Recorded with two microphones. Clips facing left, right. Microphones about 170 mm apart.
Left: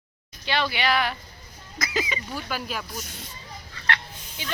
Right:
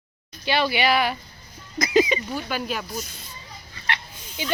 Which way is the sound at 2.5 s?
Centre (ahead or behind).